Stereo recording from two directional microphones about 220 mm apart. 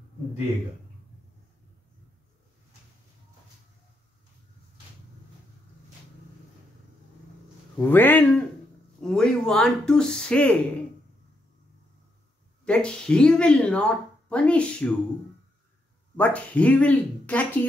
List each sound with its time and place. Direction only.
7.8 s a man's voice: 10° left (ahead or behind)
12.6 s speech: 5° left (ahead or behind)
16.2 s speech: 5° left (ahead or behind)